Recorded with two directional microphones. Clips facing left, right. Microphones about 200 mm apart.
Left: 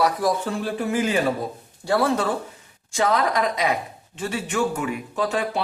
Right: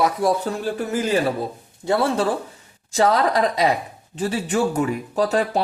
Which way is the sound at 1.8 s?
25° right (ahead or behind).